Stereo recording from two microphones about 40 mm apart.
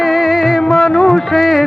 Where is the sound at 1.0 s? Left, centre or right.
Centre.